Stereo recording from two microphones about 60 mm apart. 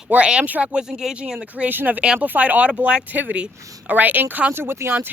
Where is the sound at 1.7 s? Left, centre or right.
Right.